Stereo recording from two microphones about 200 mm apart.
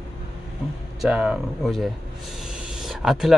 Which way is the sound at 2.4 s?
5° right (ahead or behind).